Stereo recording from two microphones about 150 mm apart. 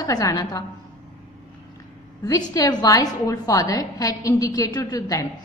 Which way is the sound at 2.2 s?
25° left (ahead or behind).